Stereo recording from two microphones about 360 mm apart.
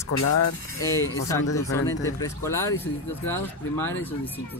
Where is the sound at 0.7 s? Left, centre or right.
Centre.